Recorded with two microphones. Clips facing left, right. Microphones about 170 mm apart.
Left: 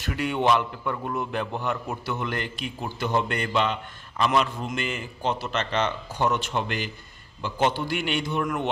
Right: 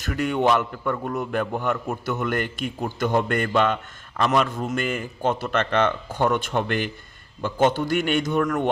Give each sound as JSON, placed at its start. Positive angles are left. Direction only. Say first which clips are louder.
{"t": 0.0, "sound": "a man's voice", "louder": "right 3 dB", "side_deg": -45}